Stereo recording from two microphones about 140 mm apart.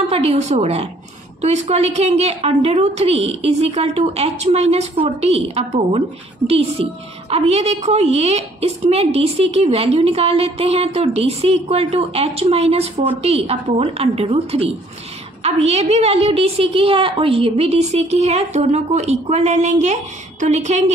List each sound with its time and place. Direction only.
0.1 s a woman's voice: 45° right (ahead or behind)